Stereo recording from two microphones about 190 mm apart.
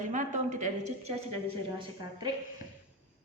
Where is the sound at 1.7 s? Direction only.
20° right (ahead or behind).